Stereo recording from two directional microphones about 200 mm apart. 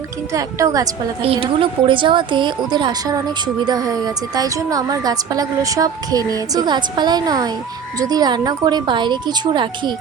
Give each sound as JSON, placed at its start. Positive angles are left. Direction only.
{"t": 0.3, "sound": "a woman's voice", "side_deg": -15}
{"t": 1.2, "sound": "a woman's voice", "side_deg": -25}